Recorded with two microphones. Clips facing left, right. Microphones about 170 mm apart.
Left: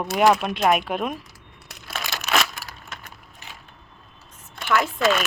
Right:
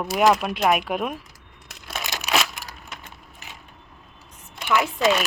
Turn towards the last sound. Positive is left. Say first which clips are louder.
# even
turn(degrees=-15)  # may be behind; listen again after turning